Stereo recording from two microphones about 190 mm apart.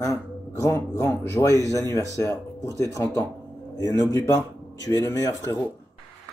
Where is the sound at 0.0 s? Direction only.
15° left (ahead or behind).